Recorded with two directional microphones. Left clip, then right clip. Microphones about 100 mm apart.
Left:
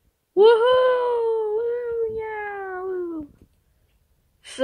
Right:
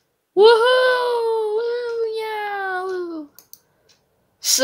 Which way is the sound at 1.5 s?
15° right (ahead or behind).